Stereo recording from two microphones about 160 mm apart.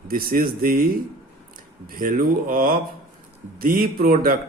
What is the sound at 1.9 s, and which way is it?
A man's voice, 60° right (ahead or behind).